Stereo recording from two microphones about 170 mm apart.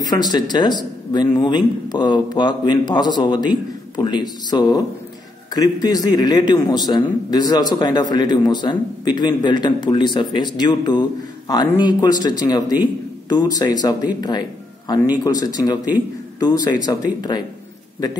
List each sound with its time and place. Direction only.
0.0 s speech: 25° left (ahead or behind)
15.2 s speech: 20° left (ahead or behind)